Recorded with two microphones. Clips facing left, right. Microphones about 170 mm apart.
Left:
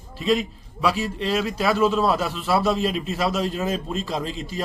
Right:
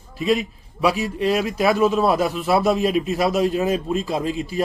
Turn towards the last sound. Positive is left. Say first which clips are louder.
# right 5 dB
turn(degrees=-10)  # may be behind; listen again after turning